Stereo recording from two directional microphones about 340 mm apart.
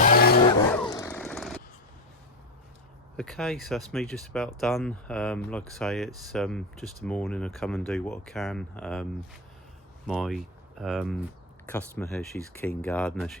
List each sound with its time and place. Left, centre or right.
0.0 s vehicle: left
0.8 s jackhammer: centre
3.2 s speech: centre
10.1 s speech: centre